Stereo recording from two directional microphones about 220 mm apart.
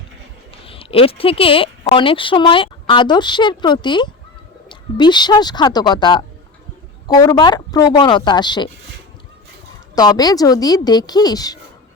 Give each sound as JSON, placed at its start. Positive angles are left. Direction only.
{"t": 0.6, "sound": "speech", "side_deg": 25}
{"t": 9.9, "sound": "a woman's voice", "side_deg": 20}